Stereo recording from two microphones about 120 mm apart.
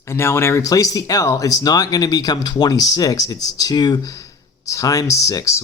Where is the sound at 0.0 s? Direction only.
20° left (ahead or behind).